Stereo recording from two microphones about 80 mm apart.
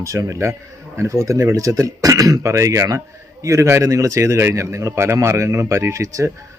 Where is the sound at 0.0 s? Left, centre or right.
Right.